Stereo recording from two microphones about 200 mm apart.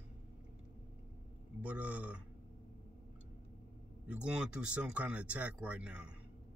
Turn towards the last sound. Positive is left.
turn(degrees=-5)  # may be behind; listen again after turning